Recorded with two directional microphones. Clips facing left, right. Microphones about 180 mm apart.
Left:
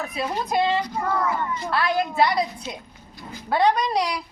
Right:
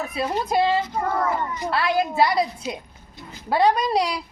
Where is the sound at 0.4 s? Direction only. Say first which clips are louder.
Right 1 dB; 25° right (ahead or behind).